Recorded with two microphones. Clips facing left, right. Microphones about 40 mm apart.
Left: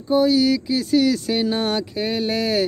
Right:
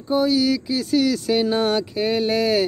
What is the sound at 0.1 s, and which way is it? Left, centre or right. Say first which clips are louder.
Speech: left 2 dB; centre.